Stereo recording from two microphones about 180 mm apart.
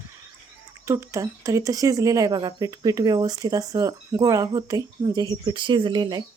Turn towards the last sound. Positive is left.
turn(degrees=-25)  # may be behind; listen again after turning